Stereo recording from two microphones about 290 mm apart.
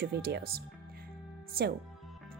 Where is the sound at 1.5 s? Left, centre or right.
Right.